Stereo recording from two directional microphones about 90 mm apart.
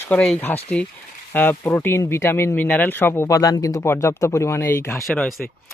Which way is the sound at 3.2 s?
40° left (ahead or behind).